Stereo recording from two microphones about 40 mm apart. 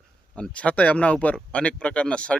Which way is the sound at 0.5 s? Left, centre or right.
Left.